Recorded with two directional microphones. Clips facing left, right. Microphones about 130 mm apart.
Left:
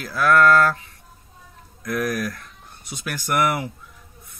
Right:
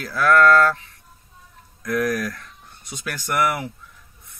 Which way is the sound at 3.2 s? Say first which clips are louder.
Left 1 dB; 25° left (ahead or behind).